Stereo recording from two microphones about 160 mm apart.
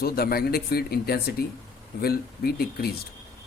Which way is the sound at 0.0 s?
70° left (ahead or behind).